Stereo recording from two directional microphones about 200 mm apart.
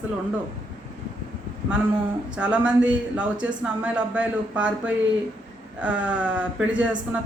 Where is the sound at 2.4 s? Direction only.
5° right (ahead or behind).